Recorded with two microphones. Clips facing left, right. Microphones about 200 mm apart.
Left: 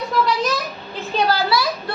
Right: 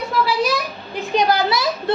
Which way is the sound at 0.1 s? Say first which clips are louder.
Right 1 dB; 10° right (ahead or behind).